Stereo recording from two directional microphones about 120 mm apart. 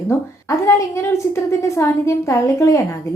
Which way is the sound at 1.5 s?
25° left (ahead or behind).